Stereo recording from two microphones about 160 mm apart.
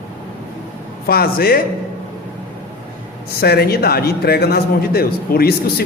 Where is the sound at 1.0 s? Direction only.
70° left (ahead or behind).